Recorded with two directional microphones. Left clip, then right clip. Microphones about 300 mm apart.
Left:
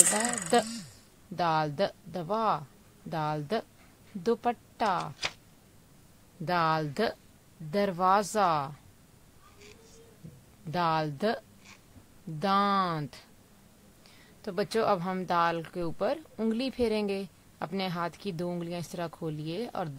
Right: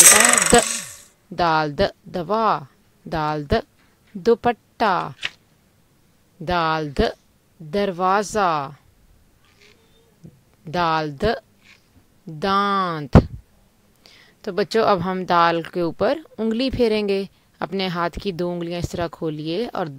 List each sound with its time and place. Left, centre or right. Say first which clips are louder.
0.1 s a sound: right 13 dB; right
1.3 s speech: right 9 dB; centre
6.4 s speech: right 7 dB; centre
10.7 s speech: right 8 dB; centre